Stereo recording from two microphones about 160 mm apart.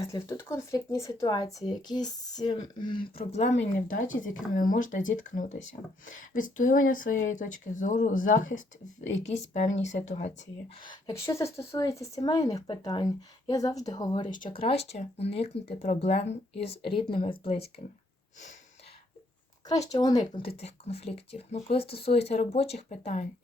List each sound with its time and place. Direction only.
0.0 s speech: 20° left (ahead or behind)
3.2 s speech: 45° left (ahead or behind)
9.3 s speech: 45° left (ahead or behind)
11.0 s speech: 20° left (ahead or behind)
14.3 s speech: 55° left (ahead or behind)
14.5 s speech: 35° left (ahead or behind)
19.9 s speech: 25° left (ahead or behind)
20.4 s speech: 40° left (ahead or behind)